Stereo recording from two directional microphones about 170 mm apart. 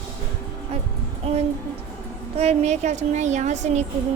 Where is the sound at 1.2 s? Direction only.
35° right (ahead or behind).